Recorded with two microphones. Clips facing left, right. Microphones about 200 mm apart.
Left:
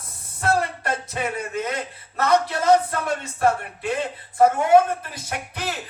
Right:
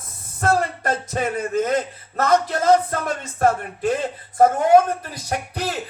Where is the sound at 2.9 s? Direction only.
40° right (ahead or behind).